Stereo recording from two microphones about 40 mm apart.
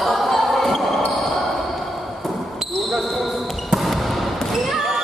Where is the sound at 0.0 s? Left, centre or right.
Centre.